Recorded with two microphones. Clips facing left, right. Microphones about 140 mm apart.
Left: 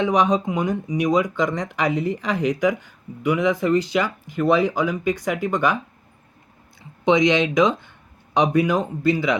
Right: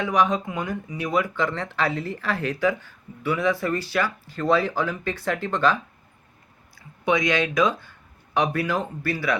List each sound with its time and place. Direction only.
0.0 s speech: 20° left (ahead or behind)